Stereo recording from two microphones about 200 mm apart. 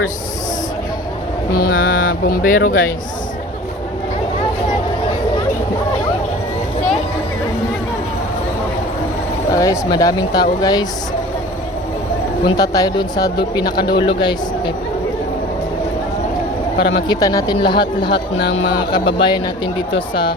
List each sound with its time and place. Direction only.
1.5 s speech: 45° left (ahead or behind)
9.5 s speech: 15° left (ahead or behind)
12.5 s speech: 20° left (ahead or behind)
17.1 s speech: 15° left (ahead or behind)
18.1 s speech: 60° left (ahead or behind)
18.5 s speech: 25° left (ahead or behind)